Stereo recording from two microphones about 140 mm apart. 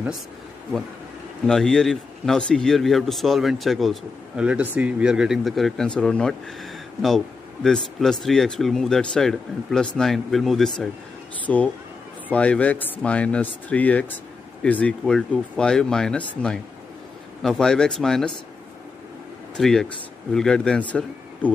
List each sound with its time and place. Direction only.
1.4 s speech: 5° left (ahead or behind)
19.5 s speech: 5° left (ahead or behind)